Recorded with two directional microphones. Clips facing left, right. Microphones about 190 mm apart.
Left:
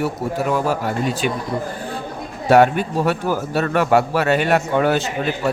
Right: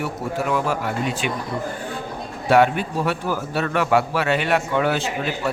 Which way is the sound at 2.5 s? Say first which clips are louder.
Left 3 dB; 45° left (ahead or behind).